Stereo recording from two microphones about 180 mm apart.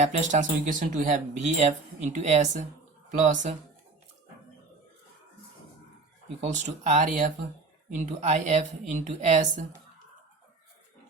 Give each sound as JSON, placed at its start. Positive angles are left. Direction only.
{"t": 0.0, "sound": "speech", "side_deg": -40}
{"t": 6.4, "sound": "speech", "side_deg": -40}